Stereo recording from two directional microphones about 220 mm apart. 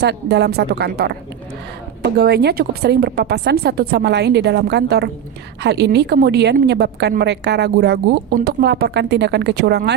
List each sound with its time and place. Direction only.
0.0 s a woman's voice: 50° right (ahead or behind)
2.1 s a woman's voice: 50° right (ahead or behind)